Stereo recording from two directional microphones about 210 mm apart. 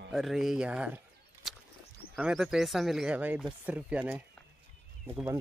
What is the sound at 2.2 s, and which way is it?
Speech, 5° right (ahead or behind).